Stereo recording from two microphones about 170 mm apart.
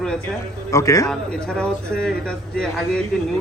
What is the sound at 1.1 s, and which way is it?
Speech, 5° left (ahead or behind).